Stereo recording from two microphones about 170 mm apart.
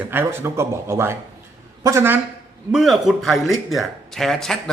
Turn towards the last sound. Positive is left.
turn(degrees=5)  # may be behind; listen again after turning